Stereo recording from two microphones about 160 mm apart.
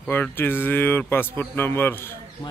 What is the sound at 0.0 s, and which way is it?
Speech, 10° left (ahead or behind).